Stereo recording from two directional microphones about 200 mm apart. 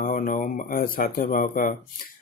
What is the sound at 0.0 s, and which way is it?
Speech, 40° left (ahead or behind).